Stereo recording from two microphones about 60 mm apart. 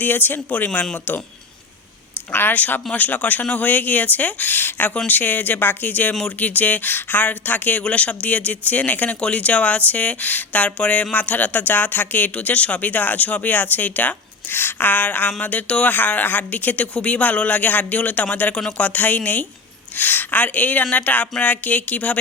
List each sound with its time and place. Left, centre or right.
0.0 s speech: left
2.3 s speech: left